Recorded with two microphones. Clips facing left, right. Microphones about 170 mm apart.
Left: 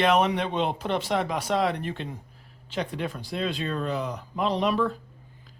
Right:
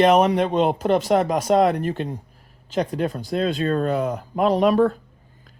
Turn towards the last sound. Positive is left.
turn(degrees=-50)  # may be behind; listen again after turning